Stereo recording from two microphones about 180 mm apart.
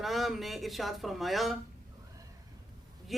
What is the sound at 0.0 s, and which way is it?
Speech, centre (ahead or behind).